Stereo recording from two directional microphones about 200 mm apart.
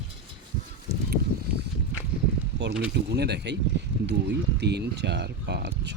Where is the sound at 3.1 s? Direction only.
55° right (ahead or behind).